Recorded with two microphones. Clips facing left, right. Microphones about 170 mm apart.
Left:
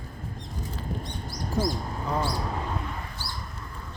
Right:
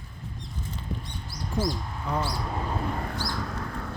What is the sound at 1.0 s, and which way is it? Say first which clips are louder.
Mouse: left 3 dB; 40° left (ahead or behind).